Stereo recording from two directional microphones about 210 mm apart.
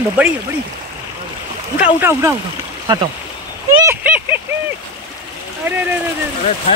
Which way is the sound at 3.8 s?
10° right (ahead or behind).